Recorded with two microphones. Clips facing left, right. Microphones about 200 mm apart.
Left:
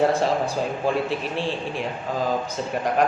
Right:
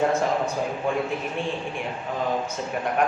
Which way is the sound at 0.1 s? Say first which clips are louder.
Left 2 dB; 30° left (ahead or behind).